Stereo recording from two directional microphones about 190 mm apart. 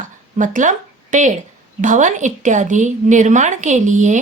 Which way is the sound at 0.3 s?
40° right (ahead or behind).